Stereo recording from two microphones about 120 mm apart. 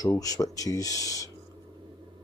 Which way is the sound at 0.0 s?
30° left (ahead or behind).